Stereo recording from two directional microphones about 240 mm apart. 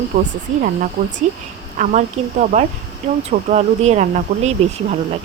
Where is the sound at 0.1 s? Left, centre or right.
Right.